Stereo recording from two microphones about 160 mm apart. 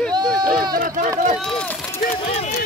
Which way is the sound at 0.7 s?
60° right (ahead or behind).